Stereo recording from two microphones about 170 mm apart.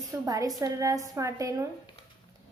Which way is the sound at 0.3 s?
20° right (ahead or behind).